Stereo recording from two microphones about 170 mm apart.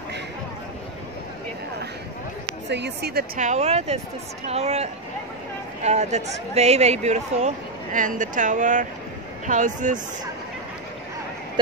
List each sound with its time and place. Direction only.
2.7 s a woman's voice: 80° right
3.3 s speech: 40° right (ahead or behind)